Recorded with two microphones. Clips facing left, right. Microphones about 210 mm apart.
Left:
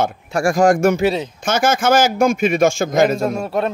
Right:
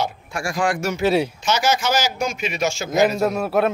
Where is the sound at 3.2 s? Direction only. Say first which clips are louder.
Even; 5° right (ahead or behind).